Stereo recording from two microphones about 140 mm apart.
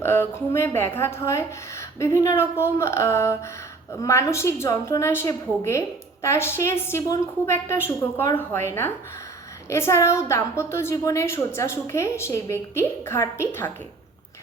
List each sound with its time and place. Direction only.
0.0 s a woman's voice: 15° left (ahead or behind)